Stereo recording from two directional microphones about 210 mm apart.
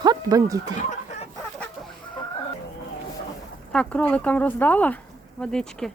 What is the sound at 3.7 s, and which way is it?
Speech, 5° left (ahead or behind).